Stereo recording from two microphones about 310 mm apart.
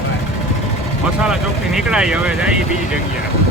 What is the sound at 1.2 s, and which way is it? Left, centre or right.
Speech, centre.